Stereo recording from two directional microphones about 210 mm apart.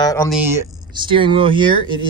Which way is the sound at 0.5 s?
25° right (ahead or behind).